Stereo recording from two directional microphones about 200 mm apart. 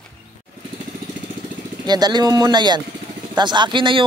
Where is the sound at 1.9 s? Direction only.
20° right (ahead or behind).